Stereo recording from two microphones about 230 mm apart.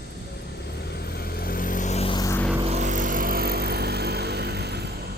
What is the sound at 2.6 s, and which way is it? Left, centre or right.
Vehicle, right.